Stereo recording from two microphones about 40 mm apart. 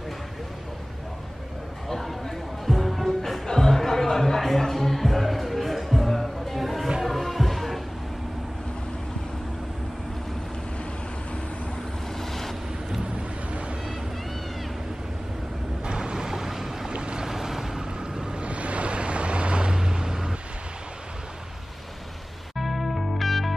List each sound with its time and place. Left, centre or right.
1.9 s music: centre
3.1 s music: centre
12.2 s vehicle: centre
15.8 s boat: right
16.9 s boat: right
22.6 s music: centre